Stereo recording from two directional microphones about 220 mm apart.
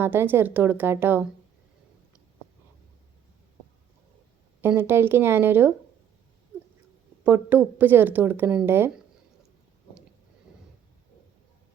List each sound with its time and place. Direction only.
0.0 s a woman's voice: 10° right (ahead or behind)
4.6 s a woman's voice: 10° right (ahead or behind)
7.3 s a woman's voice: 10° right (ahead or behind)